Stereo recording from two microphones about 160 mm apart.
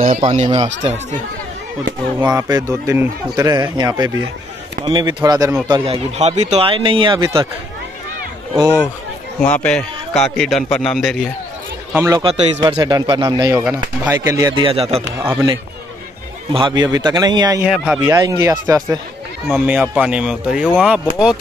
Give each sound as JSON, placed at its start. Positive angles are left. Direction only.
{"t": 0.0, "sound": "speech", "side_deg": -35}
{"t": 2.1, "sound": "speech", "side_deg": -25}
{"t": 5.9, "sound": "speech", "side_deg": -45}
{"t": 8.5, "sound": "speech", "side_deg": -20}
{"t": 9.4, "sound": "a man's voice", "side_deg": 10}
{"t": 11.9, "sound": "speech", "side_deg": -15}
{"t": 12.2, "sound": "speech", "side_deg": -35}
{"t": 14.5, "sound": "speech", "side_deg": -35}
{"t": 16.5, "sound": "speech", "side_deg": -30}
{"t": 17.6, "sound": "a man's voice", "side_deg": -5}
{"t": 18.0, "sound": "speech", "side_deg": -20}
{"t": 19.5, "sound": "speech", "side_deg": -10}